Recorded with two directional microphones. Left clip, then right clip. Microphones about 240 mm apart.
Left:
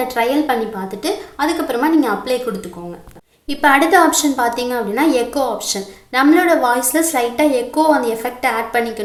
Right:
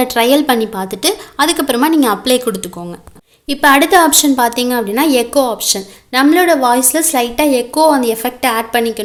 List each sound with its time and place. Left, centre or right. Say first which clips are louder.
0.1 s a woman's voice: right 5 dB; right
3.6 s a woman's voice: right 3 dB; right